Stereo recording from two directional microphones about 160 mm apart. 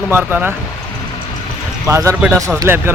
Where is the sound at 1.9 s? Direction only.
20° right (ahead or behind).